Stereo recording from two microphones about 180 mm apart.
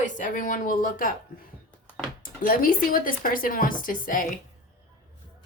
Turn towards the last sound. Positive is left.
turn(degrees=50)  # may be behind; listen again after turning